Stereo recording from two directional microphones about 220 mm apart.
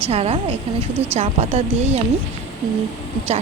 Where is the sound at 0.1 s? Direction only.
30° right (ahead or behind).